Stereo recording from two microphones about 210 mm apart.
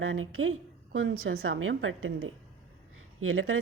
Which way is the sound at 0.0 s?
80° right.